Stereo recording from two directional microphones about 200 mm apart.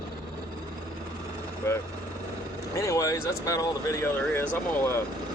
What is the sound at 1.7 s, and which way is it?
Speech, 15° left (ahead or behind).